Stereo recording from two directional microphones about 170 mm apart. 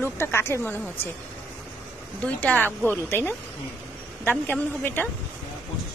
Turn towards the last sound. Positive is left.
turn(degrees=10)  # may be behind; listen again after turning